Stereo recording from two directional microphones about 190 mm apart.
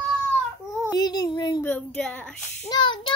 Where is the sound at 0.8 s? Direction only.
20° left (ahead or behind).